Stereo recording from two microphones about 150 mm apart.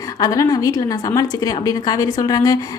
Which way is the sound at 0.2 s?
25° left (ahead or behind).